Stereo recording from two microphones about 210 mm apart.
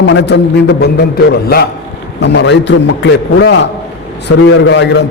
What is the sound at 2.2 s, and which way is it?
A man's voice, 55° left (ahead or behind).